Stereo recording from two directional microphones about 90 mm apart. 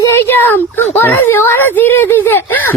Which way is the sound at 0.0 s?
25° left (ahead or behind).